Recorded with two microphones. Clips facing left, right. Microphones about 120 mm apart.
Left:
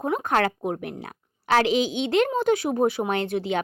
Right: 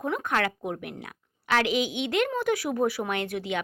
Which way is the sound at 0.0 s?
30° left (ahead or behind).